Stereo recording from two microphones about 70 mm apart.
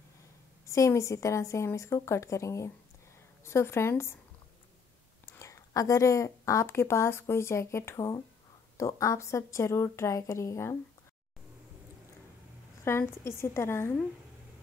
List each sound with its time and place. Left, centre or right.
0.7 s a woman's voice: left
5.4 s speech: left
12.8 s speech: left